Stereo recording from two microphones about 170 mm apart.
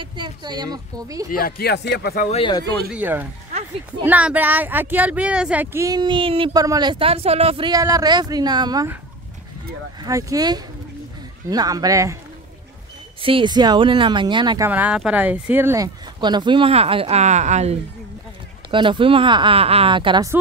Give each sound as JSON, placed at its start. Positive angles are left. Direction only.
{"t": 0.0, "sound": "speech", "side_deg": -25}
{"t": 1.3, "sound": "speech", "side_deg": 65}
{"t": 2.3, "sound": "speech", "side_deg": 30}
{"t": 2.9, "sound": "speech", "side_deg": -10}
{"t": 10.0, "sound": "speech", "side_deg": -20}
{"t": 13.2, "sound": "speech", "side_deg": -30}
{"t": 14.7, "sound": "speech", "side_deg": -10}
{"t": 18.7, "sound": "speech", "side_deg": -30}